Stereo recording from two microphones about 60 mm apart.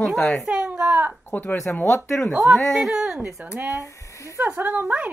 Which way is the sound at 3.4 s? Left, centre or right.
Right.